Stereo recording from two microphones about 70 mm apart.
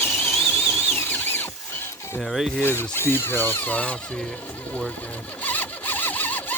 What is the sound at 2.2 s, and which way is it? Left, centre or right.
Zipper, centre.